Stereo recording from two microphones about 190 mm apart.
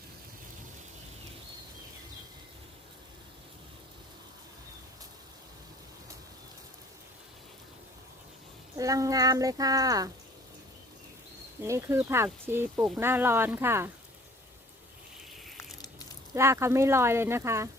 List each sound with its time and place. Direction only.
8.7 s speech: 15° right (ahead or behind)
11.6 s speech: 15° right (ahead or behind)
16.3 s speech: 15° right (ahead or behind)